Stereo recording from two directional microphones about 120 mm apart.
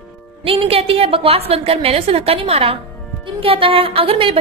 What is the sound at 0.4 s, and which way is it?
A woman's voice, 50° right (ahead or behind).